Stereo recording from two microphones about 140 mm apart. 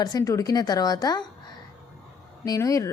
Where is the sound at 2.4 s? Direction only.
25° left (ahead or behind).